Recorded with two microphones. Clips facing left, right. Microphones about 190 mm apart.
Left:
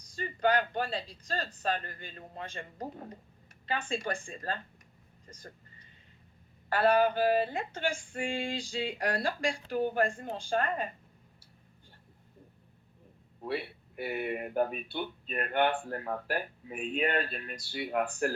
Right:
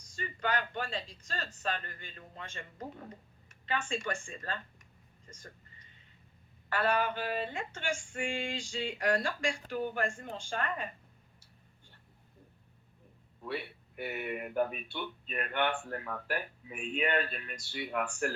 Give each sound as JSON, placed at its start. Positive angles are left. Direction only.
{"t": 0.2, "sound": "speech", "side_deg": 35}
{"t": 6.7, "sound": "speech", "side_deg": 35}
{"t": 13.4, "sound": "speech", "side_deg": 40}